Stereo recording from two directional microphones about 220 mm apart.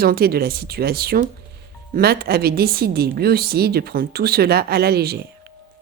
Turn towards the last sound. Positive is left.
turn(degrees=-45)  # may be behind; listen again after turning